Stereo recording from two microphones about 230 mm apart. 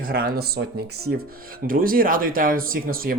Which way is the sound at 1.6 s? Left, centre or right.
Right.